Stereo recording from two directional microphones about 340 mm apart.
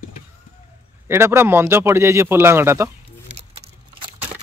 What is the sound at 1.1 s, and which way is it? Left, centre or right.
A man's voice, centre.